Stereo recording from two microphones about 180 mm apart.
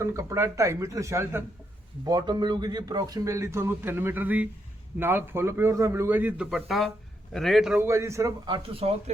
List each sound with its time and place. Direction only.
0.0 s a man's voice: 15° right (ahead or behind)
7.9 s speech: 15° right (ahead or behind)
8.4 s speech: 30° right (ahead or behind)